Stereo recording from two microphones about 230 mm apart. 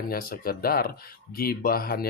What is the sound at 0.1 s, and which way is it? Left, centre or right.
Speech, left.